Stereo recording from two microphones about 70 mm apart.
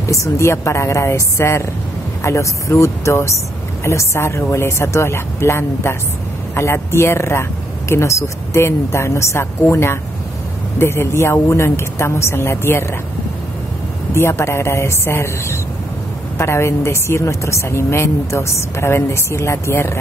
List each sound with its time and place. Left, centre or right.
0.1 s a woman's voice: left
14.1 s a woman's voice: left